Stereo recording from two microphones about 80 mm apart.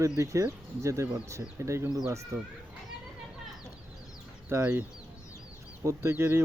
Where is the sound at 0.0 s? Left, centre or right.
Right.